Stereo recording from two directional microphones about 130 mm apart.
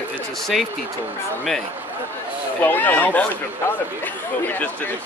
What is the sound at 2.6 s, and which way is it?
Speech, 15° left (ahead or behind).